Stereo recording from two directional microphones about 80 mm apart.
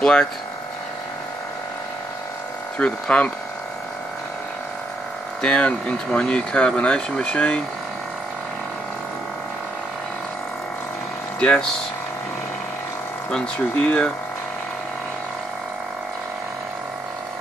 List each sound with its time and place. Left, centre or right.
0.0 s speech: centre
2.8 s speech: centre
5.4 s speech: centre
11.3 s speech: centre
13.3 s speech: centre